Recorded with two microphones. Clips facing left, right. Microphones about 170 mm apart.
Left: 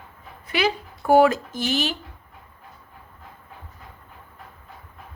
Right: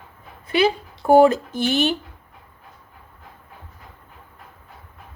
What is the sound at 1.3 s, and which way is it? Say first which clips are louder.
Speech: right 4 dB; 60° right (ahead or behind).